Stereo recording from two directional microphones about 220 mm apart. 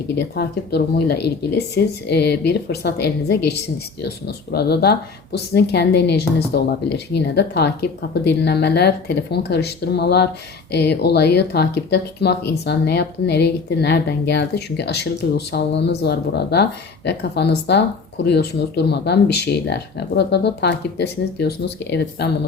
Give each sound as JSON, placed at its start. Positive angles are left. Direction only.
{"t": 0.3, "sound": "speech", "side_deg": 45}